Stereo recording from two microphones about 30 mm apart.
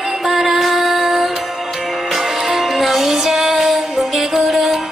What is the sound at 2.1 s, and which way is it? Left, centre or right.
Music, centre.